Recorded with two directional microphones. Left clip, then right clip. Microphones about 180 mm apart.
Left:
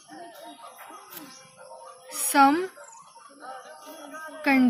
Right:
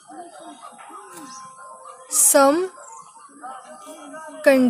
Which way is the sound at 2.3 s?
60° right (ahead or behind).